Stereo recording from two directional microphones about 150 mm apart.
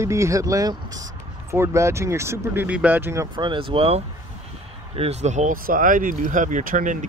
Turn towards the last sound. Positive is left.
turn(degrees=-60)  # may be behind; listen again after turning